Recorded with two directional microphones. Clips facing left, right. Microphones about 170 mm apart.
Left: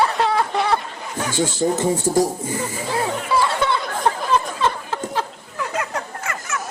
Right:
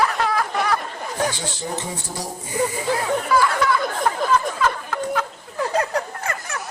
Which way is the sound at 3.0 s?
25° left (ahead or behind).